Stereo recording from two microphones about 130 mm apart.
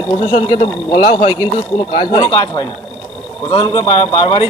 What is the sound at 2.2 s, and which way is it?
Speech, 30° left (ahead or behind).